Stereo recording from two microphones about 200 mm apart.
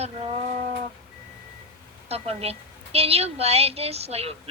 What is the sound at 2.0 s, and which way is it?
A woman's voice, 30° right (ahead or behind).